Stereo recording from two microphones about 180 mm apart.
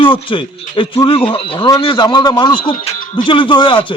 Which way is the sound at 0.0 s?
30° left (ahead or behind).